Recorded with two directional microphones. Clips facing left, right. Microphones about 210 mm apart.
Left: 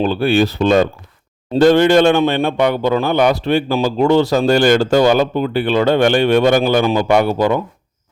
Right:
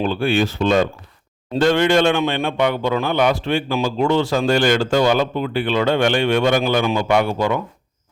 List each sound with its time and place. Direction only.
0.0 s a man's voice: 35° left (ahead or behind)